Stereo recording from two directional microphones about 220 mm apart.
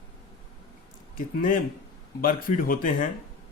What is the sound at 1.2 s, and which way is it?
Speech, 40° left (ahead or behind).